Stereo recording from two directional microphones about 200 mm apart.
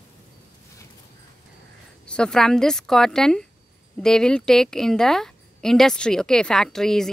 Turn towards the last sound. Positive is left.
turn(degrees=0)  # may be behind; listen again after turning